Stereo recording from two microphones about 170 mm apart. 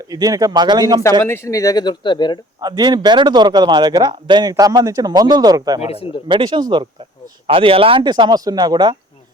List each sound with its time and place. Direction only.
0.1 s a man's voice: 20° right (ahead or behind)
1.2 s speech: 15° left (ahead or behind)
2.6 s a man's voice: 20° right (ahead or behind)
5.8 s speech: 35° left (ahead or behind)
6.2 s a man's voice: 30° right (ahead or behind)